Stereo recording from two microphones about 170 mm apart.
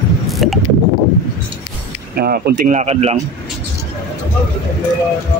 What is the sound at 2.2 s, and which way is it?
Speech, 65° right (ahead or behind).